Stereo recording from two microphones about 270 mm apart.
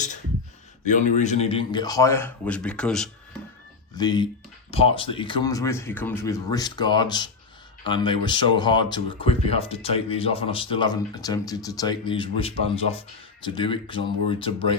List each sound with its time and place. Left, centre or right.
0.9 s speech: left; by 3.1 s centre
3.9 s speech: centre